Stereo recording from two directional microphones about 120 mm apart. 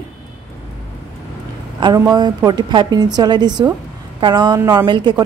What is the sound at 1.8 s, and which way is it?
A woman's voice, 35° right (ahead or behind).